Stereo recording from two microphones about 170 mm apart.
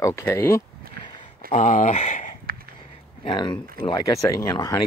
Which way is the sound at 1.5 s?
50° left (ahead or behind).